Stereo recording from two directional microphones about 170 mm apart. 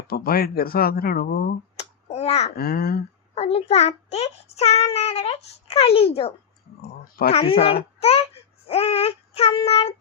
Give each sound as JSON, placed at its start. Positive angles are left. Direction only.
{"t": 0.1, "sound": "speech", "side_deg": 60}
{"t": 1.7, "sound": "a sound", "side_deg": 40}
{"t": 2.6, "sound": "speech", "side_deg": 65}
{"t": 3.3, "sound": "a child's voice", "side_deg": 40}
{"t": 7.2, "sound": "speech", "side_deg": 65}
{"t": 7.6, "sound": "a child's voice", "side_deg": 35}
{"t": 8.6, "sound": "child singing", "side_deg": 35}